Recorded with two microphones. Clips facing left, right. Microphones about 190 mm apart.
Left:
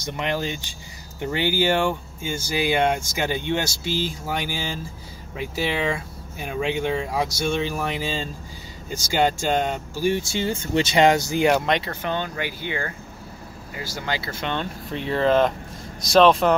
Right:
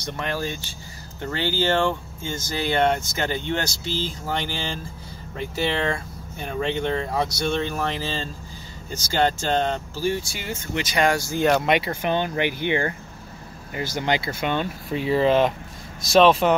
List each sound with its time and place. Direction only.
0.0 s speech: 15° left (ahead or behind)
10.4 s speech: 30° left (ahead or behind)
11.6 s speech: 10° right (ahead or behind)
13.9 s speech: 20° right (ahead or behind); by 16.5 s centre (ahead or behind)